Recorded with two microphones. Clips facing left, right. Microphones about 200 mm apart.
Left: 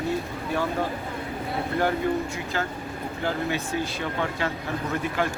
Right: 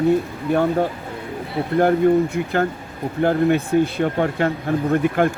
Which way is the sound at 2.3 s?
60° right (ahead or behind).